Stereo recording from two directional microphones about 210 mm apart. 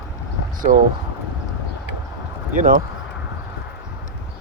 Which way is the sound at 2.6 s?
40° right (ahead or behind).